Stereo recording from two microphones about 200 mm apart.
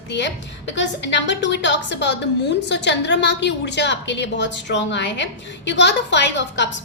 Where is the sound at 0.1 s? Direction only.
60° left (ahead or behind).